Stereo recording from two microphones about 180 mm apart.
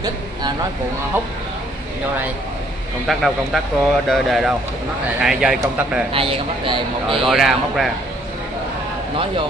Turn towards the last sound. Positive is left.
turn(degrees=0)  # may be behind; listen again after turning